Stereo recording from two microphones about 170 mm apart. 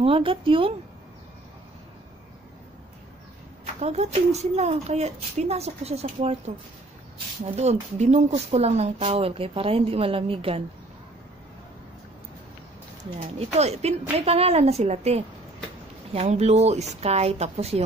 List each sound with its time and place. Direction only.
0.0 s speech: 30° right (ahead or behind)
3.8 s speech: 40° right (ahead or behind)
13.4 s speech: 40° right (ahead or behind)